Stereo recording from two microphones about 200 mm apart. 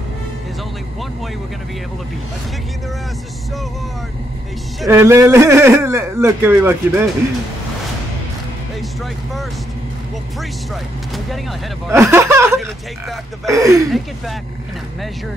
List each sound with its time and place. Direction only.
4.8 s a man's voice: 15° right (ahead or behind)
11.9 s a man's voice: 10° right (ahead or behind)
13.8 s speech: centre (ahead or behind)